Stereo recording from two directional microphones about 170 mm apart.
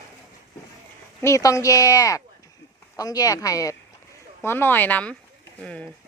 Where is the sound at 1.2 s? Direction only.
20° left (ahead or behind).